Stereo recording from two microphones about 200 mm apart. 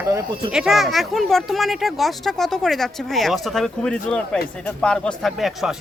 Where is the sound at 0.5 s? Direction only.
Centre (ahead or behind).